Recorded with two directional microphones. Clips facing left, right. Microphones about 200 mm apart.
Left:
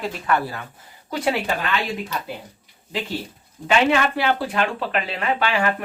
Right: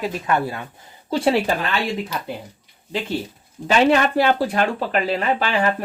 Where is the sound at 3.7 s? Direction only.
40° right (ahead or behind).